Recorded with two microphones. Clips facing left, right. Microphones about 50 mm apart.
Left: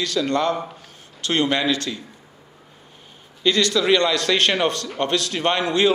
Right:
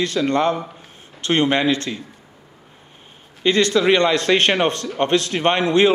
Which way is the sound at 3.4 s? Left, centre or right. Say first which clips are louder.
Right 3 dB; right.